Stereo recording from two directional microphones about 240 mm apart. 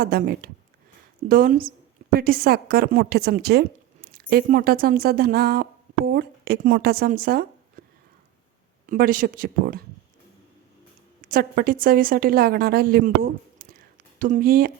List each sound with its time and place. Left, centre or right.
0.0 s a woman's voice: right
8.9 s speech: right
11.2 s a woman's voice: right